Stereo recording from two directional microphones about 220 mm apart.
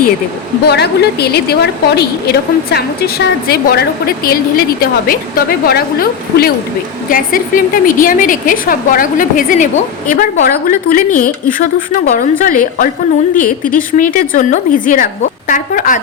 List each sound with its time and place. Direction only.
0.7 s a woman's voice: 50° left (ahead or behind)